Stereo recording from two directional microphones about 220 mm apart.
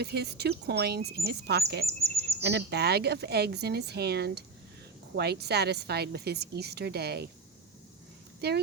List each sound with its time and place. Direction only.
0.0 s a woman's voice: 45° right (ahead or behind)
8.4 s speech: 50° right (ahead or behind)